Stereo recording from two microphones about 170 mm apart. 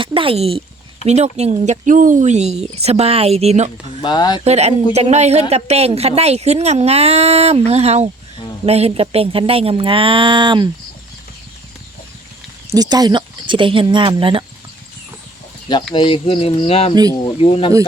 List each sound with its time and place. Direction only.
0.0 s a sound: 30° right (ahead or behind)
1.0 s a woman's voice: 40° right (ahead or behind)
4.0 s speech: 25° left (ahead or behind)
4.4 s a woman's voice: 40° right (ahead or behind)
12.7 s speech: 25° right (ahead or behind)
16.0 s speech: 30° left (ahead or behind)
16.9 s speech: 20° right (ahead or behind)
17.2 s speech: 35° left (ahead or behind)